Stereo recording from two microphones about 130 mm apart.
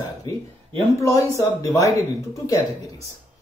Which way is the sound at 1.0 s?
25° left (ahead or behind).